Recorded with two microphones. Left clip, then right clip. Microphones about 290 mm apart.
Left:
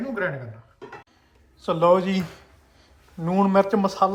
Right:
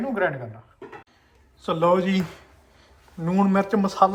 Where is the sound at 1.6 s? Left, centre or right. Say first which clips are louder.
Left 2 dB; centre.